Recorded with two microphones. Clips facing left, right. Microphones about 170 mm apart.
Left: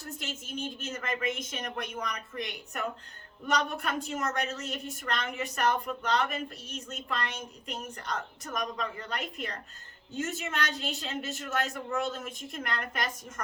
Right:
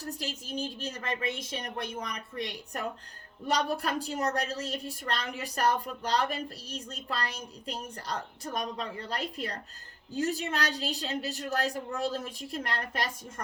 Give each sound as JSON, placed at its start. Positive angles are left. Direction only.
{"t": 0.0, "sound": "a woman's voice", "side_deg": -35}